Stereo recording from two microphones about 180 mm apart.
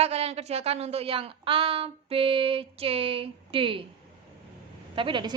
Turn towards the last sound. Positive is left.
turn(degrees=-25)  # may be behind; listen again after turning